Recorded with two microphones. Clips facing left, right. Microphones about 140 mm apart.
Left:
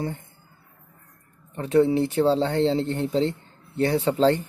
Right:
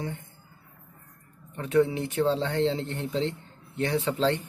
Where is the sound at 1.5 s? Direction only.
35° left (ahead or behind).